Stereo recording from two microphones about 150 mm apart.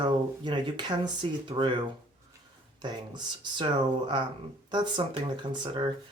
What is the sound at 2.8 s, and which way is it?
Speech, 30° right (ahead or behind).